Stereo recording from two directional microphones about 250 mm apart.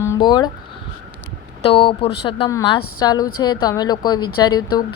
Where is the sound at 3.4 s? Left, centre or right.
Centre.